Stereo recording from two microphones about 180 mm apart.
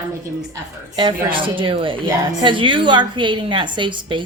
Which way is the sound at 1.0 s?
25° right (ahead or behind).